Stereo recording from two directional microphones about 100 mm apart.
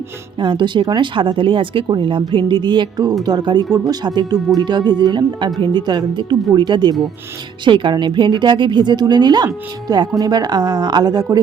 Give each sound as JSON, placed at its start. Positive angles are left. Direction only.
{"t": 0.3, "sound": "speech", "side_deg": -50}